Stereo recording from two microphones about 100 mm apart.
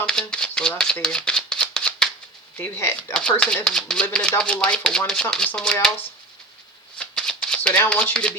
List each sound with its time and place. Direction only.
0.0 s shuffling cards: 10° left (ahead or behind)
2.6 s speech: 20° left (ahead or behind)
3.1 s speech: 10° left (ahead or behind)
7.0 s shuffling cards: 10° left (ahead or behind)